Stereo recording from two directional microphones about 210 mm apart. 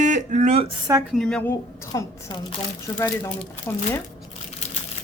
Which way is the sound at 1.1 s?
Centre (ahead or behind).